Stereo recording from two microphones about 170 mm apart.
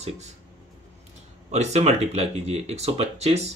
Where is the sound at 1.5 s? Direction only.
40° right (ahead or behind).